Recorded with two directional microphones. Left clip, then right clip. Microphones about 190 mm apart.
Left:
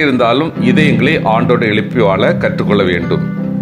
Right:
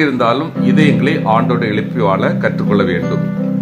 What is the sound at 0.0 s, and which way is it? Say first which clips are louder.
Speech: left 2 dB; 25° left (ahead or behind).